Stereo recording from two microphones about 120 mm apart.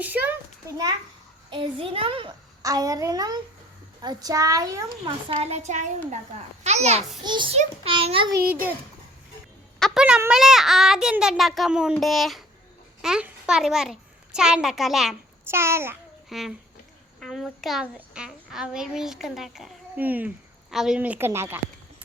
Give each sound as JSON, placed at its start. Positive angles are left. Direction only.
{"t": 0.0, "sound": "a child's voice", "side_deg": -15}
{"t": 1.5, "sound": "a child's voice", "side_deg": -45}
{"t": 2.6, "sound": "a child's voice", "side_deg": -30}
{"t": 5.0, "sound": "a woman's voice", "side_deg": -60}
{"t": 7.3, "sound": "a child's voice", "side_deg": -40}
{"t": 7.5, "sound": "a child's voice", "side_deg": -55}
{"t": 9.7, "sound": "a sound", "side_deg": 0}
{"t": 10.2, "sound": "a child's voice", "side_deg": -5}
{"t": 15.4, "sound": "a child's voice", "side_deg": -20}
{"t": 16.3, "sound": "a child's voice", "side_deg": 0}
{"t": 20.0, "sound": "a child's voice", "side_deg": -15}
{"t": 20.7, "sound": "a woman's voice", "side_deg": -5}
{"t": 21.0, "sound": "a child's voice", "side_deg": -15}